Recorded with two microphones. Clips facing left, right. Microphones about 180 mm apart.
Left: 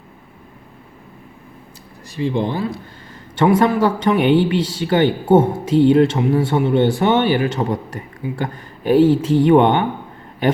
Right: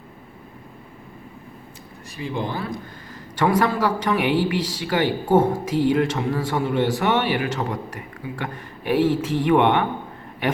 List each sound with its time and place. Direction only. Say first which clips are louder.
2.0 s speech: left 7 dB; 30° left (ahead or behind)